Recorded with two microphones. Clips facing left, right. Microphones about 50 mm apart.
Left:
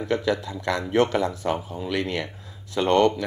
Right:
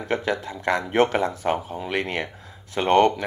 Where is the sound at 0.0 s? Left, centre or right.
Right.